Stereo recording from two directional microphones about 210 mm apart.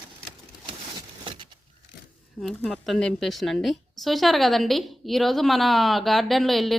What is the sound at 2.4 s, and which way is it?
A woman's voice, centre (ahead or behind).